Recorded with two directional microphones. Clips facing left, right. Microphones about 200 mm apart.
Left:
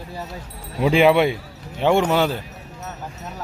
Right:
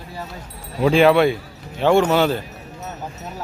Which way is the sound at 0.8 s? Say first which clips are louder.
Right 2 dB; 15° left (ahead or behind).